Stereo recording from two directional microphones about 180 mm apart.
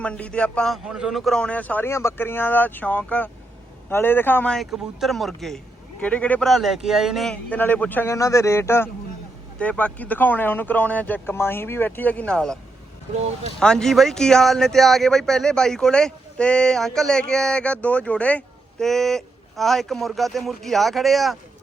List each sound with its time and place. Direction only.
0.0 s a man's voice: 5° left (ahead or behind)
13.6 s speech: 5° left (ahead or behind)